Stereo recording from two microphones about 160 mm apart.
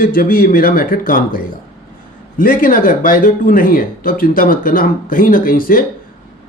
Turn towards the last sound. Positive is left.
turn(degrees=60)  # may be behind; listen again after turning